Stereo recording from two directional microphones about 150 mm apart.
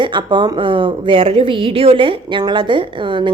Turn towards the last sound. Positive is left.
turn(degrees=-35)  # may be behind; listen again after turning